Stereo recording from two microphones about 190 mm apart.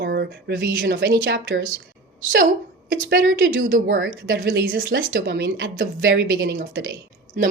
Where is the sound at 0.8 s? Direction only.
65° right (ahead or behind).